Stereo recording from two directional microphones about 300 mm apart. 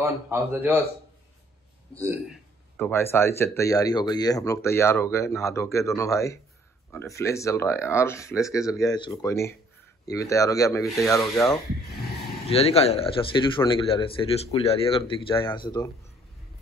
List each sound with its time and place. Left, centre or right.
0.0 s a man's voice: centre
2.0 s a man's voice: centre
2.8 s speech: centre